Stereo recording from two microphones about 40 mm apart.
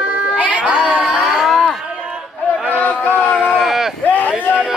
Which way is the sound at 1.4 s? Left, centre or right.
Centre.